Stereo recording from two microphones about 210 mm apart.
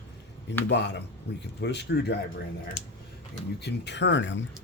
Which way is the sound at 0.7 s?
55° left (ahead or behind).